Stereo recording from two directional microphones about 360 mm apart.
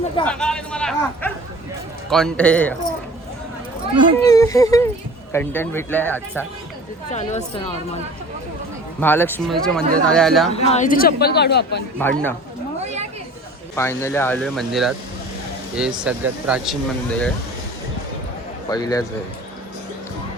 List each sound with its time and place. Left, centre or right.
0.2 s speech: centre
4.2 s speech: centre
7.1 s speech: centre
9.0 s speech: centre
10.5 s speech: centre
11.9 s speech: centre
12.8 s a sound: centre
13.7 s speech: centre
18.7 s speech: centre